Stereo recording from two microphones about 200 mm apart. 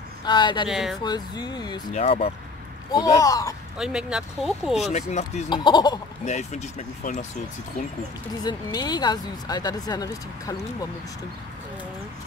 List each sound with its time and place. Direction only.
0.2 s speech: 20° left (ahead or behind)
0.7 s speech: centre (ahead or behind)
1.0 s speech: 20° left (ahead or behind)
2.9 s speech: 20° left (ahead or behind)
3.7 s speech: 5° right (ahead or behind)
4.9 s speech: 35° left (ahead or behind)
5.5 s speech: 20° left (ahead or behind)
6.2 s speech: 35° left (ahead or behind)
8.5 s speech: 20° left (ahead or behind)